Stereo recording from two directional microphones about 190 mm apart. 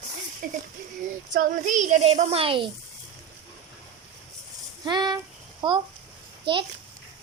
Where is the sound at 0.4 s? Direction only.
45° right (ahead or behind); by 2.6 s 30° right (ahead or behind).